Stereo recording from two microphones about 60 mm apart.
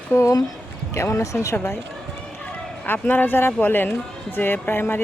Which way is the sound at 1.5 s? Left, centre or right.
Left.